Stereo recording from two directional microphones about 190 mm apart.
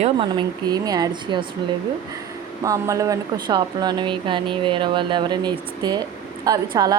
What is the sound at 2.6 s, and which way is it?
Speech, 15° right (ahead or behind).